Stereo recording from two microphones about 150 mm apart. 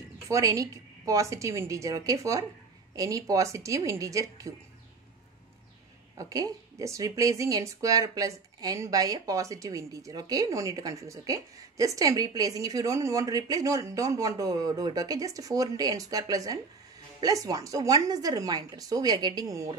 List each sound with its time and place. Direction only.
0.3 s speech: 20° right (ahead or behind)
6.1 s speech: 25° right (ahead or behind)